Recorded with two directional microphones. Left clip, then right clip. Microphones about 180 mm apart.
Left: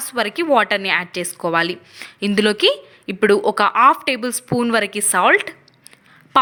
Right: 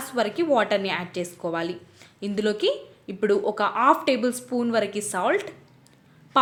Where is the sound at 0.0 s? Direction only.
20° left (ahead or behind).